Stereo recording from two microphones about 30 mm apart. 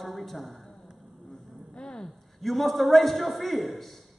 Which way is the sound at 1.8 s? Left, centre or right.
Left.